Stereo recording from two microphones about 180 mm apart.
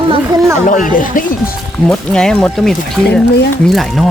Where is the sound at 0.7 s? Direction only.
45° left (ahead or behind).